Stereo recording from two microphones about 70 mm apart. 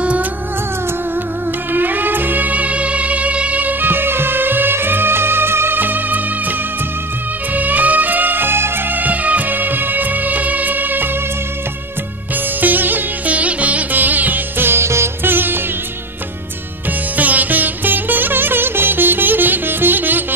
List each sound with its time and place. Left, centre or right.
0.0 s music: centre
1.7 s music: right
7.5 s music: right
12.5 s music: right
17.2 s music: right